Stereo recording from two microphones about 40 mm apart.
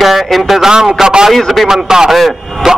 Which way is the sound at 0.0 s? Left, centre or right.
Centre.